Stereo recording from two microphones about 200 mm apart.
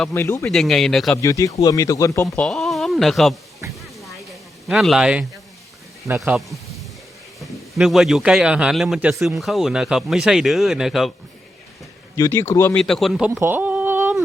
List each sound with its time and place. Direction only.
0.0 s speech: 10° left (ahead or behind)
0.4 s speech: centre (ahead or behind)
1.2 s speech: 15° left (ahead or behind)
2.2 s speech: 5° left (ahead or behind)
3.8 s music: centre (ahead or behind)
4.7 s a man's voice: centre (ahead or behind)
12.1 s speech: 15° left (ahead or behind); by 13.4 s centre (ahead or behind)
13.4 s a sound: 10° right (ahead or behind)